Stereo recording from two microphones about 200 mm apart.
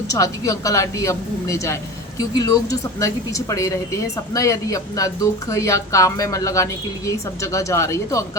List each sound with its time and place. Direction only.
0.1 s a woman's voice: 15° left (ahead or behind)